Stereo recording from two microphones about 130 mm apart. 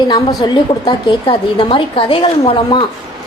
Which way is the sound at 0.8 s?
50° left (ahead or behind).